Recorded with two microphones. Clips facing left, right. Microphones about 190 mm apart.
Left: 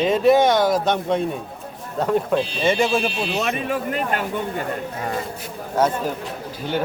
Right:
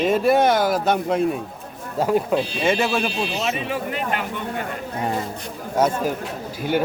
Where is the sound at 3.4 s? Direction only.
45° left (ahead or behind).